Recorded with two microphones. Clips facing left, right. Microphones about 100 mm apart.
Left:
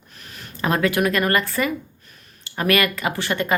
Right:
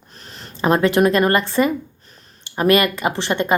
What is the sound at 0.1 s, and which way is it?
Speech, 30° right (ahead or behind).